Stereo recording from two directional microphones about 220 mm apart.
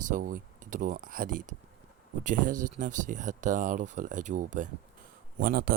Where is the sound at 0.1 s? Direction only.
40° right (ahead or behind).